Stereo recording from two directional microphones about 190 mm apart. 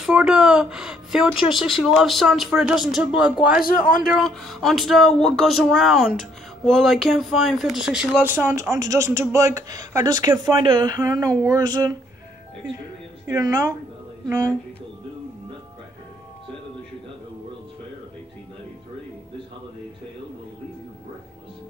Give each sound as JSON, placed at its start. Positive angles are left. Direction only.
{"t": 0.0, "sound": "speech", "side_deg": -5}
{"t": 3.6, "sound": "a man's voice", "side_deg": 50}
{"t": 4.1, "sound": "speech", "side_deg": 0}
{"t": 13.3, "sound": "speech", "side_deg": -15}